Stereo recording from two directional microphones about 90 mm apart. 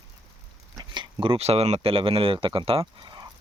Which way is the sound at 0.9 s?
65° right (ahead or behind).